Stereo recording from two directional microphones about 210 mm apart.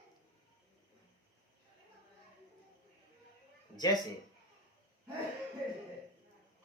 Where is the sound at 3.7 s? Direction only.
20° left (ahead or behind).